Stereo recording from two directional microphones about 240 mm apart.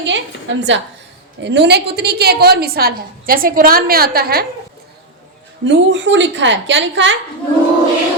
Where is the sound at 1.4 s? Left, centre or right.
Right.